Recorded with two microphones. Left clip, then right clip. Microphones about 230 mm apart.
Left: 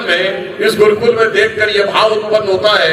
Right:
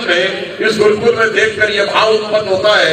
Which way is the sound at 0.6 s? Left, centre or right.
Left.